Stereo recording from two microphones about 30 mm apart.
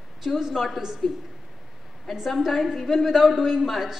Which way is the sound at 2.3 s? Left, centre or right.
Centre.